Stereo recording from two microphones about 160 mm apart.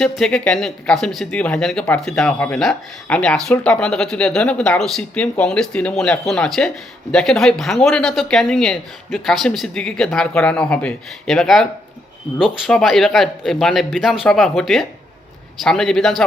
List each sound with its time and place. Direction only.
0.0 s speech: 5° left (ahead or behind)